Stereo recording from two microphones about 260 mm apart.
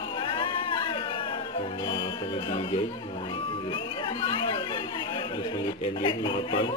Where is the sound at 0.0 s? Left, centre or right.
Centre.